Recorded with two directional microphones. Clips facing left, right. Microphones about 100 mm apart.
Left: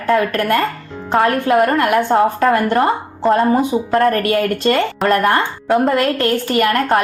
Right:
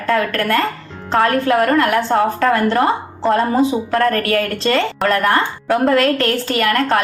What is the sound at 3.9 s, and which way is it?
A woman's voice, 30° left (ahead or behind).